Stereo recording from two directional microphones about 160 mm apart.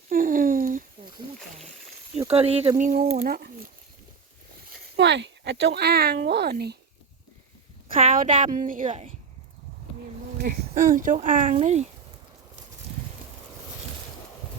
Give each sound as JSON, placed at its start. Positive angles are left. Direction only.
{"t": 0.1, "sound": "a sound", "side_deg": -55}
{"t": 2.3, "sound": "speech", "side_deg": -40}
{"t": 3.2, "sound": "speech", "side_deg": -80}
{"t": 4.9, "sound": "speech", "side_deg": -90}
{"t": 8.1, "sound": "speech", "side_deg": -55}
{"t": 10.4, "sound": "speech", "side_deg": -65}